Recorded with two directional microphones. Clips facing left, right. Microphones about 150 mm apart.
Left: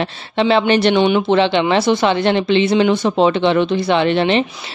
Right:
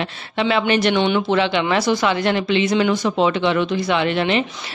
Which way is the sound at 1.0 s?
20° left (ahead or behind).